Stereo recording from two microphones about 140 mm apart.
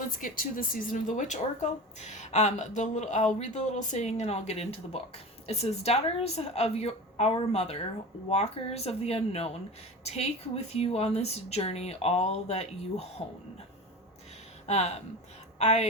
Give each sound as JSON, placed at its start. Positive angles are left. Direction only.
{"t": 0.2, "sound": "speech", "side_deg": 75}
{"t": 14.7, "sound": "a woman's voice", "side_deg": 50}